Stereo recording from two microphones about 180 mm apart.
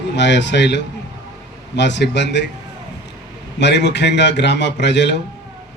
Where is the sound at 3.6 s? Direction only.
70° left (ahead or behind).